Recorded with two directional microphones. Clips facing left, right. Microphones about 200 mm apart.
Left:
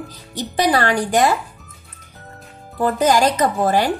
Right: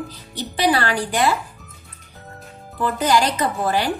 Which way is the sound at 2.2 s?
Centre (ahead or behind).